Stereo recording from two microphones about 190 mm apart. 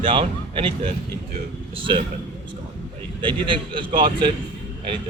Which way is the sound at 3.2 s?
25° right (ahead or behind).